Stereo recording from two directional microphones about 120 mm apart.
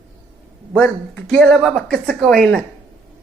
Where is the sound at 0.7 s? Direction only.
10° left (ahead or behind).